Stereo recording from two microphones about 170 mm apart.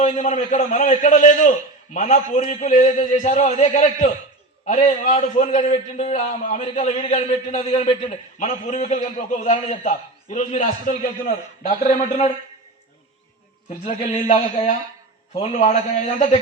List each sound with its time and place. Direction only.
0.0 s a man's voice: 45° left (ahead or behind)
13.8 s a man's voice: 40° left (ahead or behind)